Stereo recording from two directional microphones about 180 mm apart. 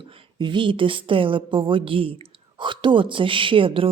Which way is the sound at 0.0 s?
30° right (ahead or behind).